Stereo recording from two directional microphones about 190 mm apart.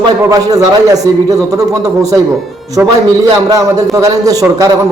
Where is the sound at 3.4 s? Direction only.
20° right (ahead or behind).